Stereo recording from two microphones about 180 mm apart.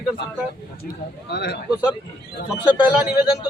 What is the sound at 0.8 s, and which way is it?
Speech, 65° left (ahead or behind).